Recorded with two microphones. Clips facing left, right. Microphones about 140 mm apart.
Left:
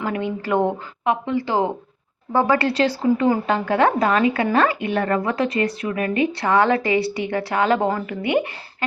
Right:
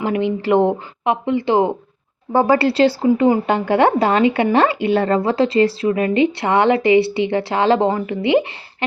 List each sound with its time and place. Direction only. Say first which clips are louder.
0.0 s speech: right 5 dB; 20° right (ahead or behind)
2.3 s speech: right 4 dB; 30° right (ahead or behind)